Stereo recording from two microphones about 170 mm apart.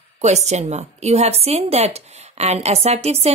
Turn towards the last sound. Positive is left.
turn(degrees=-40)  # may be behind; listen again after turning